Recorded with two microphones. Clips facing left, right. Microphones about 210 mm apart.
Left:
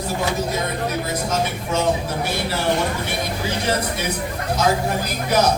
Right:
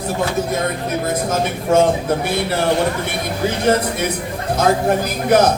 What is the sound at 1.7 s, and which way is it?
Speech, 50° right (ahead or behind).